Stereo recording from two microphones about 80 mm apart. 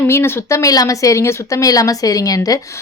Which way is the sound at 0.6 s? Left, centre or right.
Left.